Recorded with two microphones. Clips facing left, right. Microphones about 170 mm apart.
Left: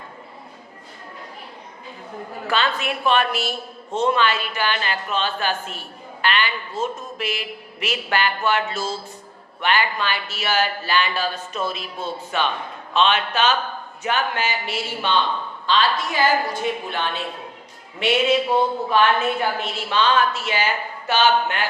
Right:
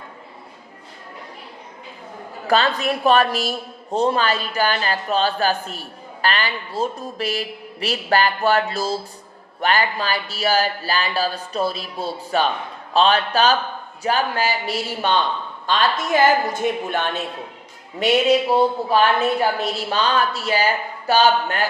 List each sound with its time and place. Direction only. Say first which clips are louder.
2.5 s a woman's voice: right 5 dB; 40° right (ahead or behind)